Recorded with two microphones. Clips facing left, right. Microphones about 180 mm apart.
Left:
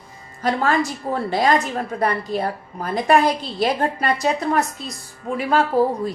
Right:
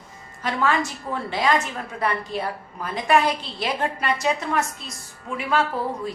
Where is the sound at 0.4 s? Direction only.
40° left (ahead or behind).